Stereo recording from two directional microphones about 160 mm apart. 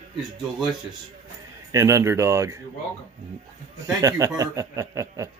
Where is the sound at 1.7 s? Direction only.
20° right (ahead or behind).